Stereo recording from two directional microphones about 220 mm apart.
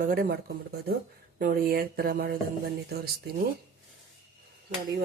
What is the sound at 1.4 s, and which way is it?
Speech, 40° right (ahead or behind).